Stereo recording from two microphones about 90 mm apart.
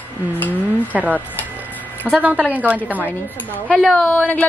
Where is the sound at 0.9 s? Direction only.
15° right (ahead or behind).